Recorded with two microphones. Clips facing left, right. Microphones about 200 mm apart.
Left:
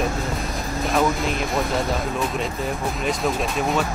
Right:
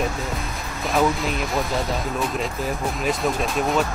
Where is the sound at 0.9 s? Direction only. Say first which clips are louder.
Right 1 dB; centre (ahead or behind).